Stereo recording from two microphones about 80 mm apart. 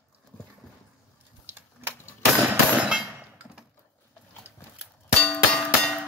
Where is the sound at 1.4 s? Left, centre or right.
Right.